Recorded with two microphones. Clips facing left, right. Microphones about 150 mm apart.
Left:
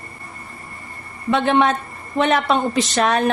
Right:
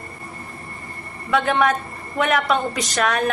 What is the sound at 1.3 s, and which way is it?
A woman's voice, 25° left (ahead or behind).